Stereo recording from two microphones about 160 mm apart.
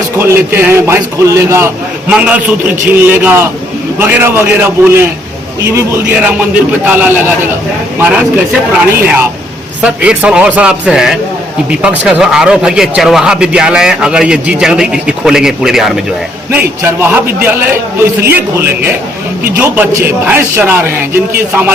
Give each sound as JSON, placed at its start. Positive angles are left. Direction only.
{"t": 0.2, "sound": "a man's voice", "side_deg": -15}
{"t": 19.5, "sound": "a man's voice", "side_deg": -10}